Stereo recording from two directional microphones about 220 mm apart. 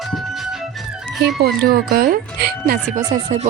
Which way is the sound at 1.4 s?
45° right (ahead or behind).